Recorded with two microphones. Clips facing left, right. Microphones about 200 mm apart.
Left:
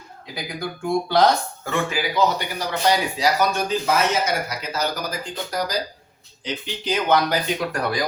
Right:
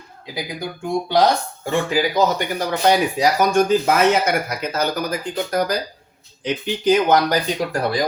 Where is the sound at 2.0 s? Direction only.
45° right (ahead or behind).